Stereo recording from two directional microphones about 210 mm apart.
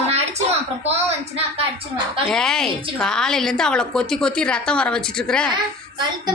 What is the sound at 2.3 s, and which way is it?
Speech, centre (ahead or behind).